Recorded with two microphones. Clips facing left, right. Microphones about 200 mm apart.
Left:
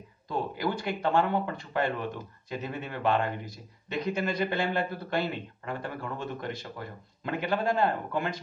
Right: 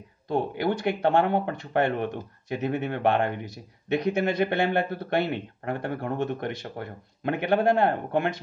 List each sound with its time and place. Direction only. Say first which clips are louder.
0.3 s a man's voice: right 5 dB; 60° right (ahead or behind)